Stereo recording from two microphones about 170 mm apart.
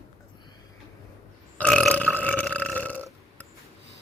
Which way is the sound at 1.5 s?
5° left (ahead or behind).